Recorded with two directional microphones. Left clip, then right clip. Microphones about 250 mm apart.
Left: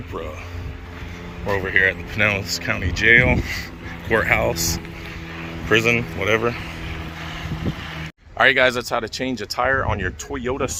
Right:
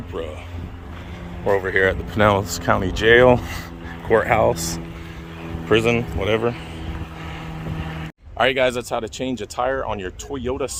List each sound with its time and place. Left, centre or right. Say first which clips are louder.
1.5 s speech: left 2 dB; centre
4.1 s speech: right 2 dB; centre
5.6 s speech: even; centre
8.4 s speech: left 3 dB; centre